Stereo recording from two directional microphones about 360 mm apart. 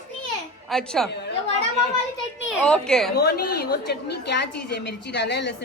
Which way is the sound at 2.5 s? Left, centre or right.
Centre.